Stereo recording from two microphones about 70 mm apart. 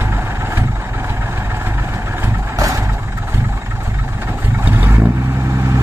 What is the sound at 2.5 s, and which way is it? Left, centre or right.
Vehicle, right.